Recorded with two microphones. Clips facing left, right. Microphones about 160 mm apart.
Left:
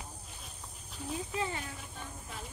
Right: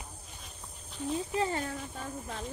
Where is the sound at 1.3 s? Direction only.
40° right (ahead or behind).